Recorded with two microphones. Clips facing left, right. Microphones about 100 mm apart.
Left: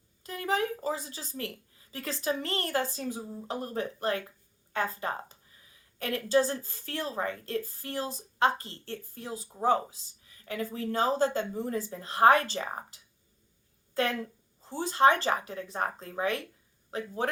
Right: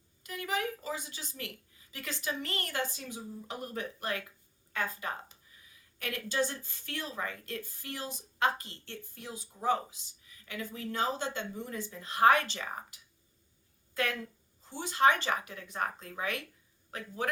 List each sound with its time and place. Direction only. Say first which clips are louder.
0.2 s a woman's voice: left 5 dB; 35° left (ahead or behind)